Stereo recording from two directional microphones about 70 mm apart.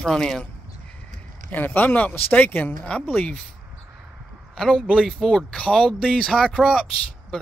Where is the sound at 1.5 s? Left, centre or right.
Left.